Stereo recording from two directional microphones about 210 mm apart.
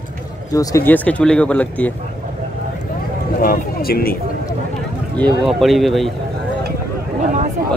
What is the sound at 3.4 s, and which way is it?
Speech, 45° left (ahead or behind).